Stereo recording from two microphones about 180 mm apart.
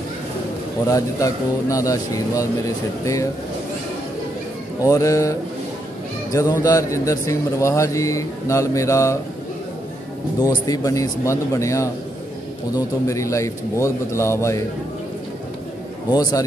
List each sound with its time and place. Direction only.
0.8 s speech: 20° left (ahead or behind)
4.8 s speech: 20° left (ahead or behind)
10.4 s speech: 20° left (ahead or behind)
16.1 s speech: 20° left (ahead or behind)